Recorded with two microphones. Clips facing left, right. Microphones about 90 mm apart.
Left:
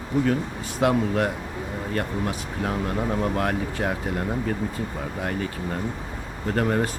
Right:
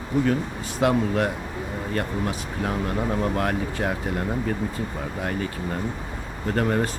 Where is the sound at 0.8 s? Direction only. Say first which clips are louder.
Even; centre (ahead or behind).